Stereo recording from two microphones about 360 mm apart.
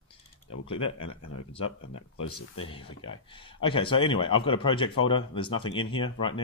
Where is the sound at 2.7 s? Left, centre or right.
Centre.